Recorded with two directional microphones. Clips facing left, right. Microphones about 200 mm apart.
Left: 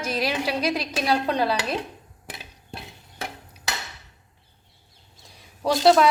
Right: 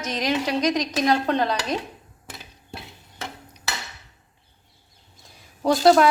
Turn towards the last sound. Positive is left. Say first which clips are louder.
# right 1 dB
turn(degrees=0)  # may be behind; listen again after turning